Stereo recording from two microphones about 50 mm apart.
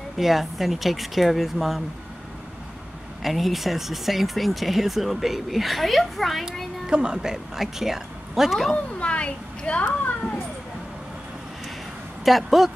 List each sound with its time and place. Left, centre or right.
0.2 s speech: centre
3.2 s speech: centre
6.9 s speech: centre
9.0 s a woman's voice: left
12.3 s speech: centre